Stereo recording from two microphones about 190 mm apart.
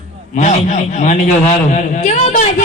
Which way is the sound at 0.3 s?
40° left (ahead or behind).